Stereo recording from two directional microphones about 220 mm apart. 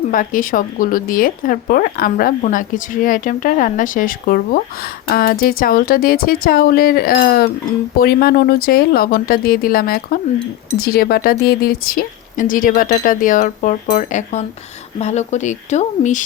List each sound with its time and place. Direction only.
0.1 s speech: 40° left (ahead or behind)